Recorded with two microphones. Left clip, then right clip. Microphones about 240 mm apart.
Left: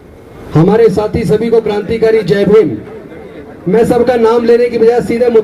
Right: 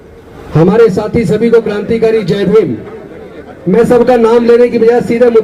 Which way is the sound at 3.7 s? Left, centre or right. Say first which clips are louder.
Right 2 dB; left.